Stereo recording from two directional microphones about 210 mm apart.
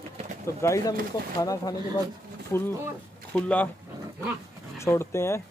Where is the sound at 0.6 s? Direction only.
15° left (ahead or behind).